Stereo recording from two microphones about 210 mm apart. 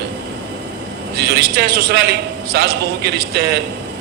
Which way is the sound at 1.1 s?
50° right (ahead or behind).